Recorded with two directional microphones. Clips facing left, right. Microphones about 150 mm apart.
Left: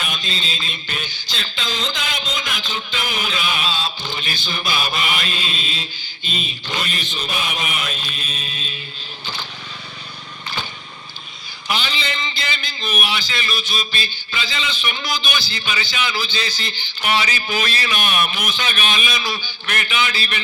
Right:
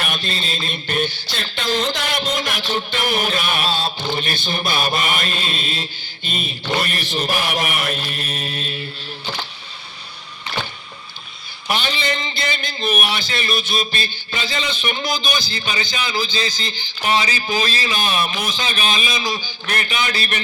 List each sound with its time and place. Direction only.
0.0 s music: 60° right (ahead or behind)
6.7 s chant: 60° right (ahead or behind)
11.7 s a man's voice: 50° right (ahead or behind)